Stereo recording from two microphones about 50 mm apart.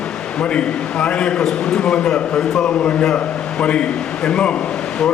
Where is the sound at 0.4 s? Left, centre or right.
Left.